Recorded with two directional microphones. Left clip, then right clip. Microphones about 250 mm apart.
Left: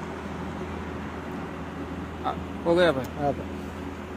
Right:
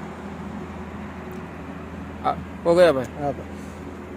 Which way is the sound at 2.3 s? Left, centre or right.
Right.